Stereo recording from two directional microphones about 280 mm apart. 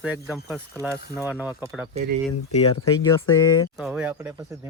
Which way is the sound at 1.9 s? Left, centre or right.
Right.